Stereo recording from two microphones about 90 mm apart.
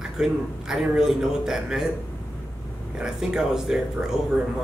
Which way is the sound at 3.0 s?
5° right (ahead or behind).